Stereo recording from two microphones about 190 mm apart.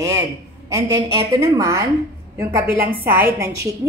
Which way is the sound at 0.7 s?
15° right (ahead or behind).